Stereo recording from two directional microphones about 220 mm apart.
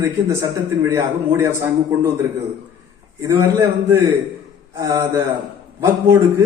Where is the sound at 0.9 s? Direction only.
10° right (ahead or behind).